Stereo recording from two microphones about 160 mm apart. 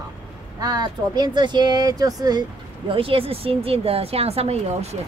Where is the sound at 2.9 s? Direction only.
35° right (ahead or behind).